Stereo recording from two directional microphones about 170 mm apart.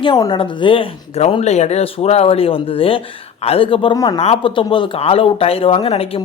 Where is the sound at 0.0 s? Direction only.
30° left (ahead or behind).